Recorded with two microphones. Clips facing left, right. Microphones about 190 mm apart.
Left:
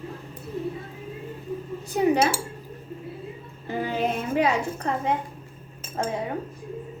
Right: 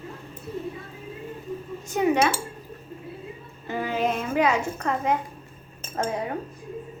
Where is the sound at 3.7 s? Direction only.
35° left (ahead or behind).